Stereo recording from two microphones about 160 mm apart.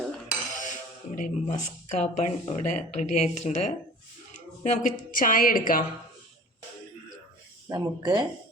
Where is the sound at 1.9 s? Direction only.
45° left (ahead or behind).